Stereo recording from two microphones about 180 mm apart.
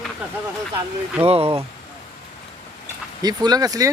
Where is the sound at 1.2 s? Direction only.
30° right (ahead or behind).